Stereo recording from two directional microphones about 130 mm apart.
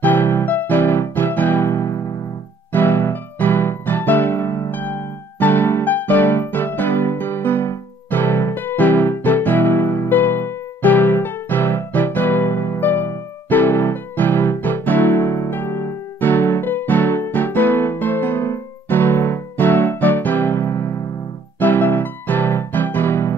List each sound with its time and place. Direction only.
0.0 s music: 15° left (ahead or behind)